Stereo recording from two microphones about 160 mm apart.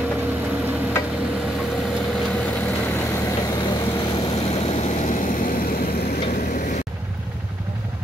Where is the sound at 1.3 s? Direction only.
Centre (ahead or behind); by 6.2 s 70° left (ahead or behind).